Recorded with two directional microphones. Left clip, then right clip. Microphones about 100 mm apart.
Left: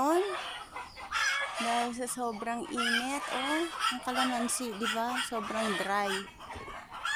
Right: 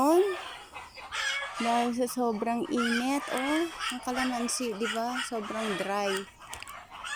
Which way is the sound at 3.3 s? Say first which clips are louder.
Right 2 dB; 5° left (ahead or behind).